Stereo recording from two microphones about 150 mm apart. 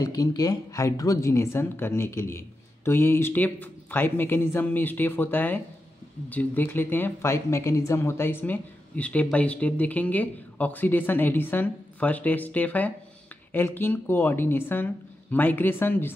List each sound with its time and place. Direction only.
0.0 s speech: 25° left (ahead or behind)